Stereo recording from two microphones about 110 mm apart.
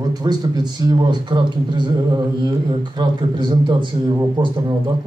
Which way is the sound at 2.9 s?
45° right (ahead or behind).